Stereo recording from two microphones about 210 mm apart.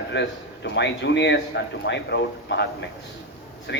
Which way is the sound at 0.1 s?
55° left (ahead or behind).